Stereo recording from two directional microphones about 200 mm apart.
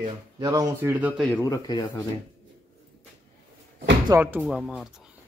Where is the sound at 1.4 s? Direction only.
15° left (ahead or behind).